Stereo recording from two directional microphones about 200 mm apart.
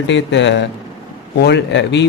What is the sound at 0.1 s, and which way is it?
A man's voice, 65° left (ahead or behind).